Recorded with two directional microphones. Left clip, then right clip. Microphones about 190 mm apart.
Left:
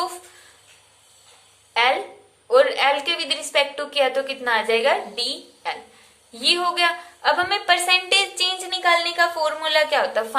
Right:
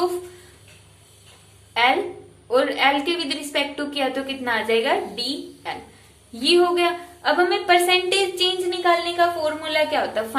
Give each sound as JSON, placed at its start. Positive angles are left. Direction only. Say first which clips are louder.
{"t": 2.5, "sound": "a woman's voice", "louder": "left 2 dB", "side_deg": 25}